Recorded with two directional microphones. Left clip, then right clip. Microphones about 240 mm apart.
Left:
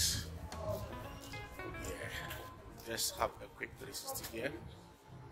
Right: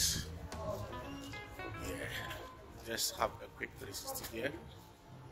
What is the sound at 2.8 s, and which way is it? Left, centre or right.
Speech, centre.